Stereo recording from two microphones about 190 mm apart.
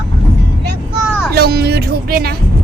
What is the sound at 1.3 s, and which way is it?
Speech, 55° right (ahead or behind).